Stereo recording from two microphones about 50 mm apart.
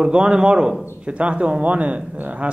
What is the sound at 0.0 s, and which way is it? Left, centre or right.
Speech, right.